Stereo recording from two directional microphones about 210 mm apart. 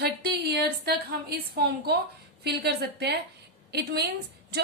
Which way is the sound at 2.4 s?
50° right (ahead or behind).